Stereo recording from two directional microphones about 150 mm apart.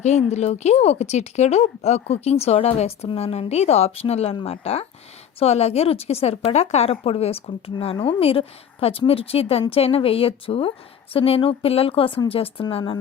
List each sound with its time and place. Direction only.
0.0 s a woman's voice: 50° left (ahead or behind); by 13.0 s 30° left (ahead or behind)